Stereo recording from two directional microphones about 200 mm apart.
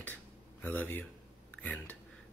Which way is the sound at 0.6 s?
10° left (ahead or behind).